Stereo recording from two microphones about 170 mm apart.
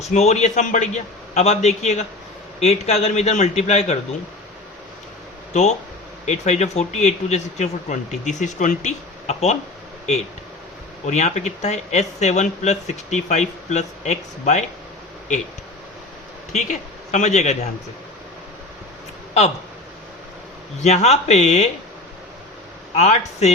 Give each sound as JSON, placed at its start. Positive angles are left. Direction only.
{"t": 0.0, "sound": "a man's voice", "side_deg": 40}
{"t": 6.2, "sound": "speech", "side_deg": 45}
{"t": 11.0, "sound": "speech", "side_deg": 40}
{"t": 16.5, "sound": "a man's voice", "side_deg": 45}
{"t": 20.8, "sound": "a man's voice", "side_deg": 40}
{"t": 23.0, "sound": "speech", "side_deg": 40}